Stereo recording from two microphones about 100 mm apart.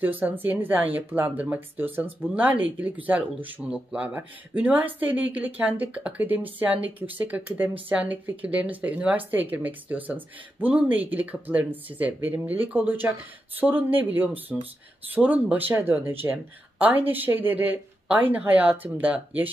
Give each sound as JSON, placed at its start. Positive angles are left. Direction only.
{"t": 0.0, "sound": "speech", "side_deg": -20}